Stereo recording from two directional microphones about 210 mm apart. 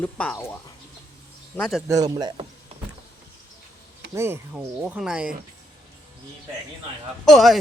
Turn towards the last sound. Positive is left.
turn(degrees=0)  # may be behind; listen again after turning